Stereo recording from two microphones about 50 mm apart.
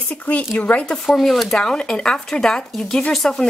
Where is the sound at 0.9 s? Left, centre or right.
Centre.